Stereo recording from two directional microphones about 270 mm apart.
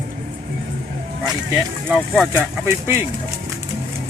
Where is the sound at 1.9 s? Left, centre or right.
Centre.